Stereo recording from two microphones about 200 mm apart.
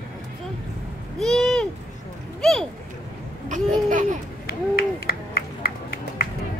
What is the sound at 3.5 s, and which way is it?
Babbling, 40° right (ahead or behind).